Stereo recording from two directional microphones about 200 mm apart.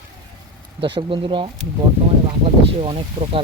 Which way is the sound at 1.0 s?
25° right (ahead or behind).